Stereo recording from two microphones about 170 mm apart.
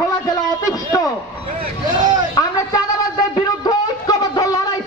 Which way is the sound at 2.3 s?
20° left (ahead or behind).